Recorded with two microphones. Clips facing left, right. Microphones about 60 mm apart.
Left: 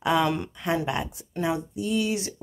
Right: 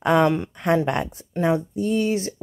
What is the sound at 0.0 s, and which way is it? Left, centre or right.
Speech, right.